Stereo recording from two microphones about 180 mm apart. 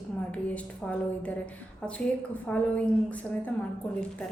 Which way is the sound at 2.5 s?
10° left (ahead or behind).